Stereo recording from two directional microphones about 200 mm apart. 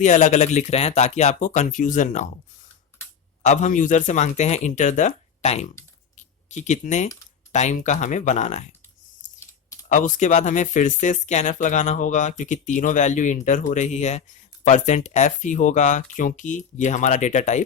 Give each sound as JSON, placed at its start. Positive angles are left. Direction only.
{"t": 0.0, "sound": "speech", "side_deg": 35}
{"t": 3.4, "sound": "speech", "side_deg": 35}
{"t": 9.9, "sound": "speech", "side_deg": 40}